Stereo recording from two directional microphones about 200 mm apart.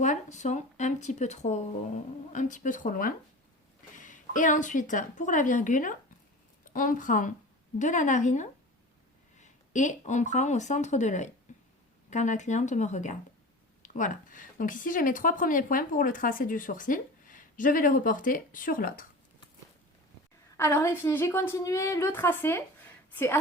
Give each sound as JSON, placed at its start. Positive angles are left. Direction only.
{"t": 0.0, "sound": "a woman's voice", "side_deg": 35}
{"t": 11.5, "sound": "a sound", "side_deg": 35}
{"t": 12.1, "sound": "speech", "side_deg": 35}
{"t": 20.6, "sound": "a woman's voice", "side_deg": 10}